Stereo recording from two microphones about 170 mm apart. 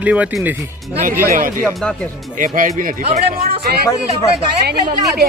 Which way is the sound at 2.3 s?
55° right (ahead or behind).